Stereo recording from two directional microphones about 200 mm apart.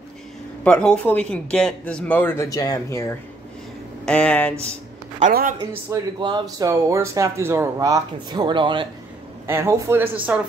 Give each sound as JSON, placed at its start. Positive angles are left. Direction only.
{"t": 0.7, "sound": "speech", "side_deg": 5}
{"t": 5.2, "sound": "a woman's voice", "side_deg": -45}
{"t": 6.1, "sound": "speech", "side_deg": -20}
{"t": 9.5, "sound": "speech", "side_deg": -15}